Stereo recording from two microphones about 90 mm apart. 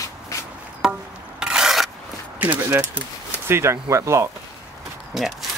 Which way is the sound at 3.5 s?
30° right (ahead or behind).